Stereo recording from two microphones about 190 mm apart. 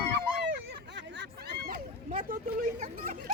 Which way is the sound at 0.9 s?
65° right (ahead or behind).